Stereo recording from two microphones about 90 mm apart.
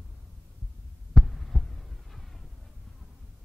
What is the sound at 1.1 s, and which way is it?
Heart sounds, centre (ahead or behind).